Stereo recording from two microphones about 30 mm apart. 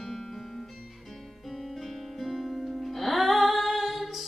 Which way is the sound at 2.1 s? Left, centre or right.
Centre.